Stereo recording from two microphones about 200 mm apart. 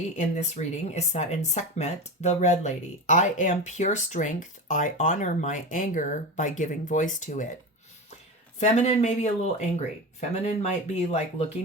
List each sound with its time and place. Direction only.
0.2 s speech: 35° left (ahead or behind)
8.5 s speech: 35° left (ahead or behind)